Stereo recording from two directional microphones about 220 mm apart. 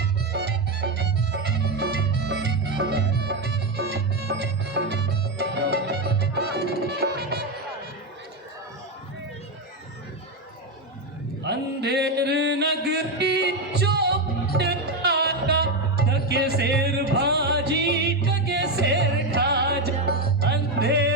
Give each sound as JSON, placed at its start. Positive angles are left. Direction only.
{"t": 0.0, "sound": "music", "side_deg": -50}
{"t": 11.4, "sound": "a sound", "side_deg": -50}
{"t": 16.0, "sound": "music", "side_deg": -50}